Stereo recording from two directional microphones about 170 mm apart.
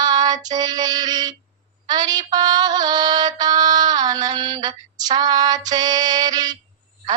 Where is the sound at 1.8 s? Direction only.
25° right (ahead or behind).